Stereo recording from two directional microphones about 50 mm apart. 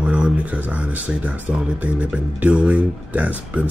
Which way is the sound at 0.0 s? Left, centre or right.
Right.